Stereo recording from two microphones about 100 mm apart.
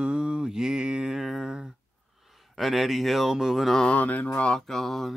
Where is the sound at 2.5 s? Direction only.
Centre (ahead or behind).